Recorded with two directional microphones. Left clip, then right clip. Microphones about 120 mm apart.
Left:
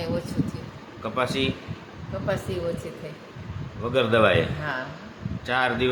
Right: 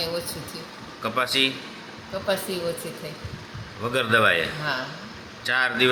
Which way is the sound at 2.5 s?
45° left (ahead or behind).